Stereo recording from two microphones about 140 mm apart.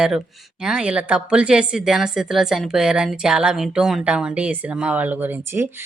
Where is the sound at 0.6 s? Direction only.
5° right (ahead or behind).